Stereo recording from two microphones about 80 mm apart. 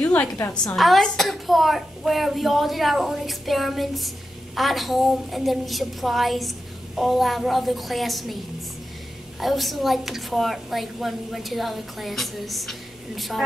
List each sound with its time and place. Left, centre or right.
0.0 s a sound: centre
0.7 s a woman's voice: centre
9.4 s a woman's voice: centre